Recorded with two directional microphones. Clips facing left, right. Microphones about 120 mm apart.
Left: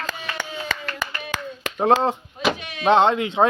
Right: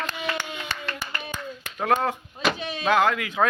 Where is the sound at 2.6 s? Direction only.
30° right (ahead or behind).